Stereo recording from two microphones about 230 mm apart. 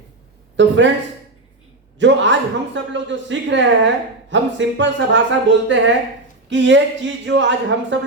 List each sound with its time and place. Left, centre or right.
0.5 s a man's voice: right
2.0 s a man's voice: right